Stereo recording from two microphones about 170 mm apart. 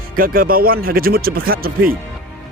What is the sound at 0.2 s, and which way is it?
A man's voice, 60° right (ahead or behind).